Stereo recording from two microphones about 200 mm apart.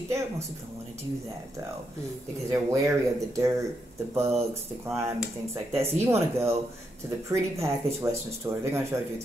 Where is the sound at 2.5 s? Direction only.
15° right (ahead or behind).